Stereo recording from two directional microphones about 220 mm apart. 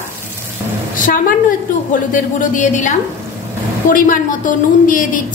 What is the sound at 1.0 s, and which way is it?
A woman's voice, 40° left (ahead or behind).